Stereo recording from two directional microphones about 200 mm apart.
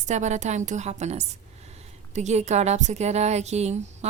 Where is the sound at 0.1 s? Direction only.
35° right (ahead or behind).